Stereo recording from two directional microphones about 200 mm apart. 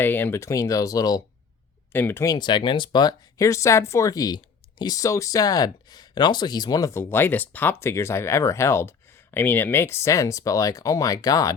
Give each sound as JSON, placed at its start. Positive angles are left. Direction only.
{"t": 0.0, "sound": "speech", "side_deg": 10}